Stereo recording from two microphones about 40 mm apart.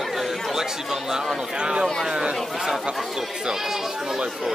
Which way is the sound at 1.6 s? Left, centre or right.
Right.